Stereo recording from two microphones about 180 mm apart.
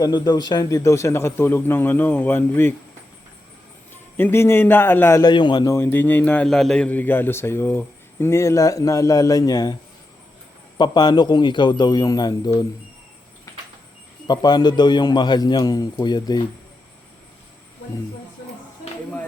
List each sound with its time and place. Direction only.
0.0 s a man's voice: 25° left (ahead or behind)
4.2 s a man's voice: 15° left (ahead or behind)
10.8 s a man's voice: 25° left (ahead or behind)
14.3 s a man's voice: 25° left (ahead or behind)